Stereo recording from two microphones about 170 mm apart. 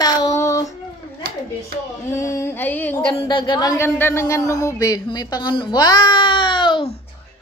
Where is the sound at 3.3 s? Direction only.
25° left (ahead or behind).